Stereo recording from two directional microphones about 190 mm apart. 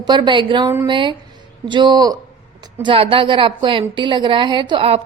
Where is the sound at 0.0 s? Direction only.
25° right (ahead or behind).